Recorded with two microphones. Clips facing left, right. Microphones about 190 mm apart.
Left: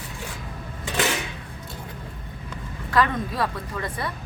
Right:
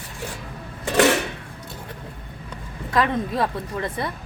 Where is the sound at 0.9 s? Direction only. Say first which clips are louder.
Right 8 dB; 65° right (ahead or behind).